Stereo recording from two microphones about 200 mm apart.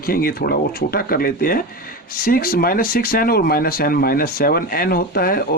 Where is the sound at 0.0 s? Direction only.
45° left (ahead or behind).